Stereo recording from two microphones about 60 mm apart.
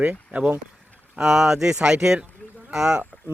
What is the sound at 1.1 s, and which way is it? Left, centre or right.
Speech, centre.